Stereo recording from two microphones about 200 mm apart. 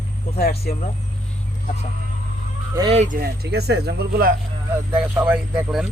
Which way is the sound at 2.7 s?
20° right (ahead or behind).